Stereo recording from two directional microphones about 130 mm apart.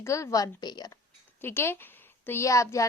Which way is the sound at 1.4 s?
20° left (ahead or behind).